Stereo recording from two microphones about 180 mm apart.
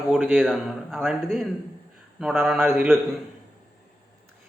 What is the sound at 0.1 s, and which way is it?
A man's voice, 10° right (ahead or behind).